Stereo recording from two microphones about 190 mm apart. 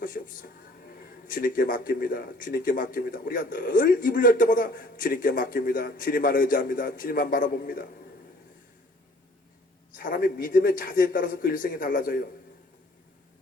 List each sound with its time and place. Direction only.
0.0 s speech: 45° left (ahead or behind)
9.9 s speech: 50° left (ahead or behind)